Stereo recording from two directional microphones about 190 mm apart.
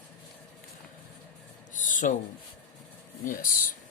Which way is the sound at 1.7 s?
45° left (ahead or behind).